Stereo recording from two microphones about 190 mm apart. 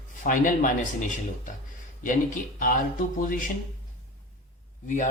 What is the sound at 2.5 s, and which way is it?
Speech, 45° left (ahead or behind).